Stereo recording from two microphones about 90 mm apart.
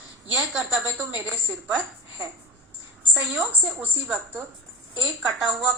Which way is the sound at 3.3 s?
15° right (ahead or behind).